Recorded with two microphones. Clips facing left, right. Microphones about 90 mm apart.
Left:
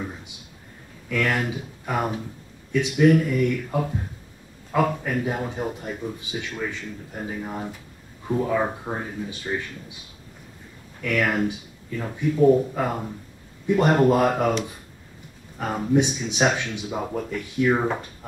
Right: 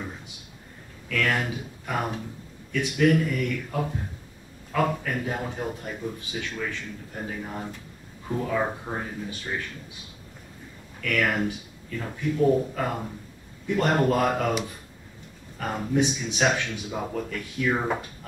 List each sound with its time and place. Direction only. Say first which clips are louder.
1.0 s speech: left 2 dB; 15° left (ahead or behind)
5.0 s speech: left 3 dB; 15° left (ahead or behind)
11.0 s speech: left 2 dB; 15° left (ahead or behind)
15.5 s speech: left 5 dB; 10° left (ahead or behind)